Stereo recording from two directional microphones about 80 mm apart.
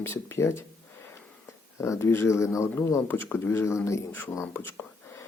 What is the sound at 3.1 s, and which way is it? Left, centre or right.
Speech, left.